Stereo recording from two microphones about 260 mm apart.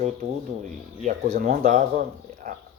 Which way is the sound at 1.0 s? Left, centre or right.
Right.